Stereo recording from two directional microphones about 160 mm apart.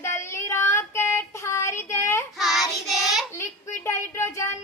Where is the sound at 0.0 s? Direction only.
15° left (ahead or behind).